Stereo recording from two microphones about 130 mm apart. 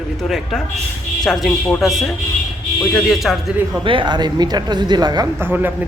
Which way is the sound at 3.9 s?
40° right (ahead or behind).